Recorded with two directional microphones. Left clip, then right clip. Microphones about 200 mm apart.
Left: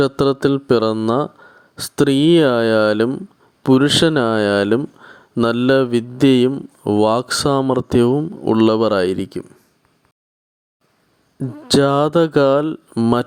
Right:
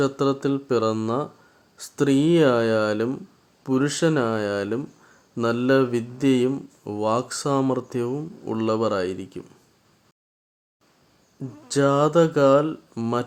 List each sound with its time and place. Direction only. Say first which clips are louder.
0.0 s speech: left 7 dB; 35° left (ahead or behind)
11.3 s speech: left 14 dB; 30° left (ahead or behind)
11.8 s speech: left 3 dB; 45° left (ahead or behind)
13.0 s speech: left 9 dB; 30° left (ahead or behind)